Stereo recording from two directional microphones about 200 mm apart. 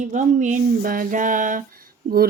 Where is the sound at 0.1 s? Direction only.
40° right (ahead or behind).